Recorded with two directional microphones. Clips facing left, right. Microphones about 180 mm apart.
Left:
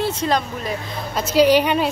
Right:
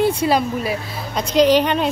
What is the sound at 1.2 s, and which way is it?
Speech, 10° left (ahead or behind).